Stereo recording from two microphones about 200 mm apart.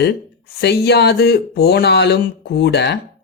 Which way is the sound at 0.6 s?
55° left (ahead or behind).